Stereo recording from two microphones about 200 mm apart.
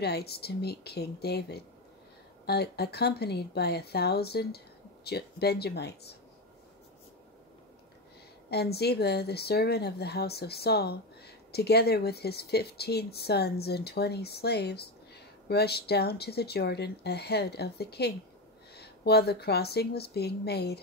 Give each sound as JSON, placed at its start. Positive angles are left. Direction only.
{"t": 0.0, "sound": "speech", "side_deg": 55}
{"t": 8.5, "sound": "speech", "side_deg": 55}